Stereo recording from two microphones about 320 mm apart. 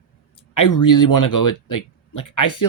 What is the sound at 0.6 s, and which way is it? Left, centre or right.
Speech, left.